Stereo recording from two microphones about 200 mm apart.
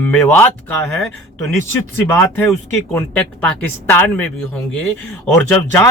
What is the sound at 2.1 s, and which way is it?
Speech, 10° left (ahead or behind).